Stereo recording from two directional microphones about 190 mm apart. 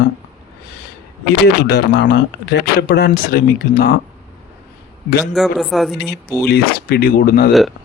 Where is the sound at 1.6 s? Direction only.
60° left (ahead or behind).